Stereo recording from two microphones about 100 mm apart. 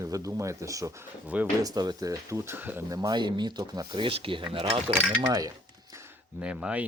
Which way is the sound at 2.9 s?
40° right (ahead or behind).